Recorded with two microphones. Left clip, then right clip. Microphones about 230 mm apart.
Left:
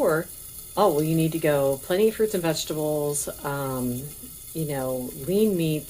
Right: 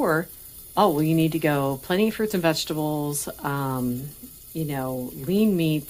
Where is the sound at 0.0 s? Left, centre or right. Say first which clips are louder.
Even; right.